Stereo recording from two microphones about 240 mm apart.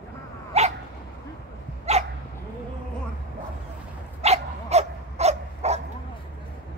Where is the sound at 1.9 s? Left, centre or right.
Right.